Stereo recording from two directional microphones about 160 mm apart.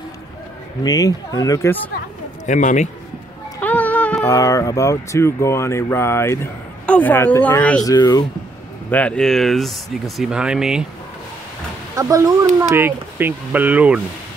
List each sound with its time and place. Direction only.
0.8 s speech: 20° left (ahead or behind)
2.4 s speech: 50° left (ahead or behind)
3.6 s music: 10° left (ahead or behind)
4.3 s speech: 20° left (ahead or behind)
7.8 s speech: 25° left (ahead or behind)
8.9 s speech: 5° left (ahead or behind)
11.9 s speech: 20° right (ahead or behind)